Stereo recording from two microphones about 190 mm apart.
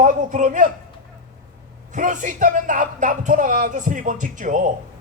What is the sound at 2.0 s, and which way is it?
A man's voice, 40° right (ahead or behind).